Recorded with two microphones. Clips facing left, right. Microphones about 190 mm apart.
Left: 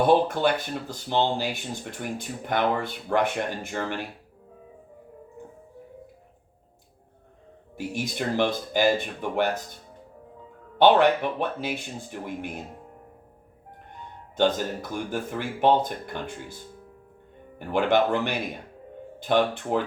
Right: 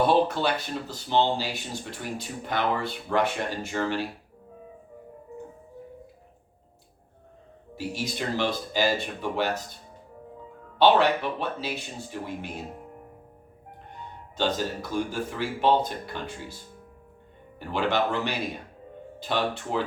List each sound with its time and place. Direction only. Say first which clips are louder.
0.1 s speech: left 2 dB; 50° left (ahead or behind)
7.8 s speech: left 1 dB; 55° left (ahead or behind)
10.8 s speech: left 2 dB; 55° left (ahead or behind)
14.3 s speech: left 4 dB; 55° left (ahead or behind)
17.7 s speech: left 4 dB; 55° left (ahead or behind)